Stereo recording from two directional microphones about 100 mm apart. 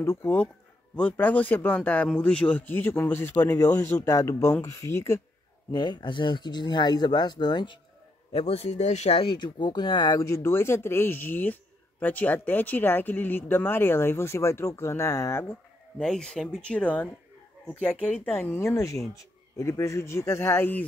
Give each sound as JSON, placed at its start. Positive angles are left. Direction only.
{"t": 0.0, "sound": "speech", "side_deg": 25}
{"t": 5.7, "sound": "speech", "side_deg": 45}
{"t": 8.3, "sound": "speech", "side_deg": 85}
{"t": 9.2, "sound": "speech", "side_deg": 50}
{"t": 10.1, "sound": "speech", "side_deg": 30}
{"t": 16.0, "sound": "speech", "side_deg": 5}